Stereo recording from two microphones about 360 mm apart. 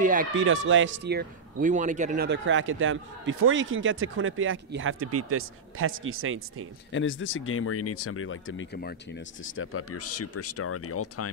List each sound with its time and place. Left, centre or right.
0.0 s speech: right
6.9 s speech: left